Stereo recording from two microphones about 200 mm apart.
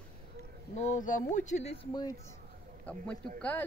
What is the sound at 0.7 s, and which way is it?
Speech, 35° left (ahead or behind).